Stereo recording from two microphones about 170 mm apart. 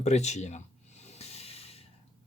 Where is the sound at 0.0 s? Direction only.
40° left (ahead or behind).